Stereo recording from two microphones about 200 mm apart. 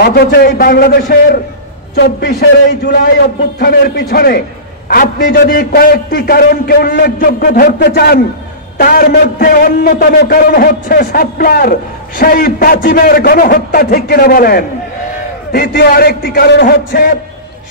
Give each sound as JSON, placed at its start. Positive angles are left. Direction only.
{"t": 0.0, "sound": "a man's voice", "side_deg": 50}
{"t": 2.0, "sound": "a man's voice", "side_deg": 55}